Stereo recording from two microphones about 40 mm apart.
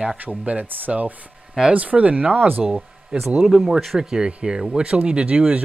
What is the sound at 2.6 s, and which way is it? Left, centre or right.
Speech, right.